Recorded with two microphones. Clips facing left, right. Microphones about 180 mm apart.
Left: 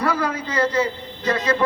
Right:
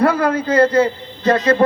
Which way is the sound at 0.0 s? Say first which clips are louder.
Right 7 dB; 55° right (ahead or behind).